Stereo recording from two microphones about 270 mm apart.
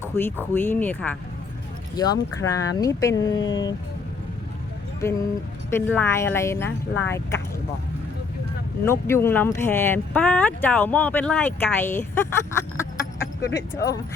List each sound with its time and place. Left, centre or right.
0.0 s speech: centre
3.4 s speech: left
5.7 s speech: centre
8.8 s speech: centre